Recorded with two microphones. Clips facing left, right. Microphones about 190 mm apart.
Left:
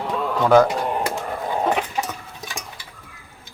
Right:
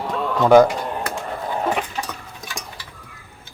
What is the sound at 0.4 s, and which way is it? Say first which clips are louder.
Speech: right 3 dB; 15° right (ahead or behind).